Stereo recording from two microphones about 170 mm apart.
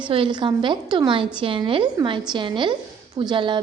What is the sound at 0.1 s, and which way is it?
A woman's voice, 30° right (ahead or behind).